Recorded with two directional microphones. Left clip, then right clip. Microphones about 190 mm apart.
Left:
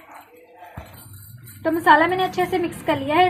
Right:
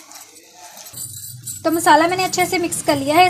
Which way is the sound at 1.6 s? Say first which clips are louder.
Right 2 dB; 55° right (ahead or behind).